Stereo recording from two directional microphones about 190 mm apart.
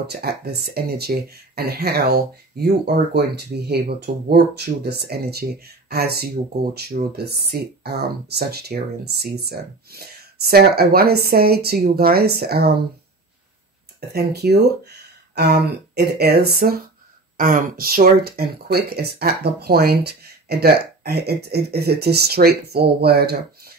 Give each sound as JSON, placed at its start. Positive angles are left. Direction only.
{"t": 0.0, "sound": "speech", "side_deg": -60}
{"t": 14.0, "sound": "speech", "side_deg": -60}